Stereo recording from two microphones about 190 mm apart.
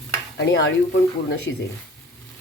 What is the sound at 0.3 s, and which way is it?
Speech, 70° left (ahead or behind).